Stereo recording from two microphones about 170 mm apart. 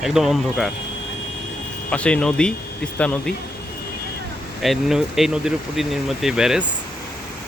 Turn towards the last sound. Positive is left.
turn(degrees=-5)  # may be behind; listen again after turning